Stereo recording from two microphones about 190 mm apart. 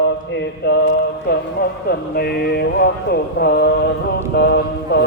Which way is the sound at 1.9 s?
55° left (ahead or behind).